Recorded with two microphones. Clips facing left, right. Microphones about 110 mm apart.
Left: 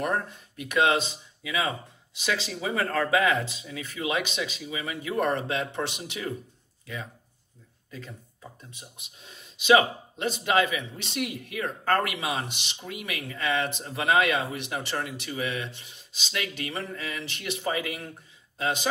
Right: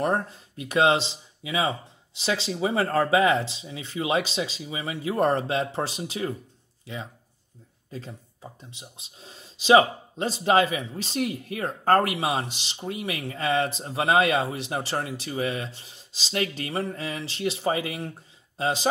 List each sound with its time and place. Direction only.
0.0 s speech: 30° right (ahead or behind)